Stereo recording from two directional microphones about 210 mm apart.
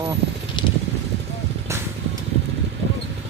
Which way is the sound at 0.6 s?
20° left (ahead or behind).